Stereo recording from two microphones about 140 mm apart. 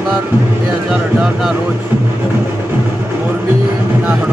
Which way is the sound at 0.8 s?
5° right (ahead or behind).